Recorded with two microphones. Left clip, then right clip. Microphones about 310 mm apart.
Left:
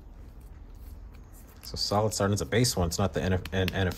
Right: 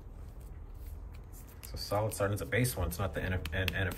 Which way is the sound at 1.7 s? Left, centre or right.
Centre.